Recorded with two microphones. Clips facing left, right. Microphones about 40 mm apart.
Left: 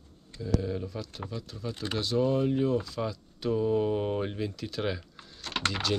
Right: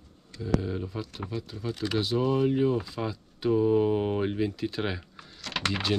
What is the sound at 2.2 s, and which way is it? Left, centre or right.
Speech, right.